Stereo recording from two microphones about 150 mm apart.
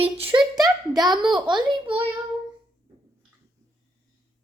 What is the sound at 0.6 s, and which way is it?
Speech, 25° right (ahead or behind).